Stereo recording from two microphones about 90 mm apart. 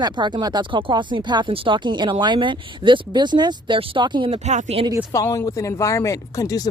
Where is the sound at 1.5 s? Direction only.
75° right (ahead or behind); by 4.8 s 90° right.